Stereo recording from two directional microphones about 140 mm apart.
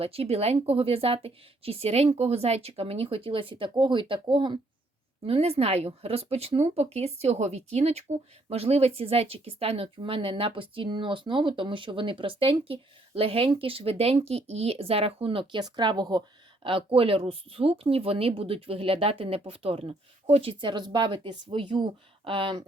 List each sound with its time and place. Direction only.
0.0 s speech: 45° right (ahead or behind)